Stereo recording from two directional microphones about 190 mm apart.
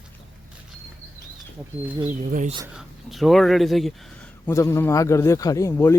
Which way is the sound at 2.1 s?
40° right (ahead or behind).